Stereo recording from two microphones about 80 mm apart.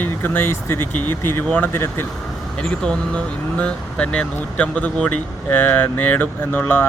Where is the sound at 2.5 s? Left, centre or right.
Centre.